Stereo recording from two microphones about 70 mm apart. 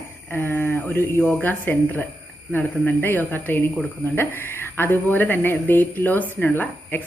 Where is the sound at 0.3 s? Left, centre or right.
Left.